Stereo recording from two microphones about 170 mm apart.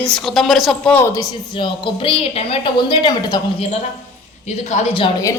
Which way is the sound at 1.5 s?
30° left (ahead or behind).